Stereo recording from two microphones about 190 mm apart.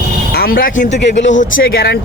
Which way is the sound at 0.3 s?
50° left (ahead or behind).